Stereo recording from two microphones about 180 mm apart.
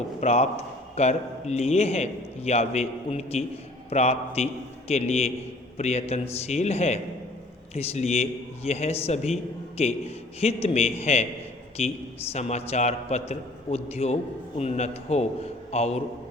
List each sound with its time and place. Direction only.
0.2 s a man's voice: 35° left (ahead or behind)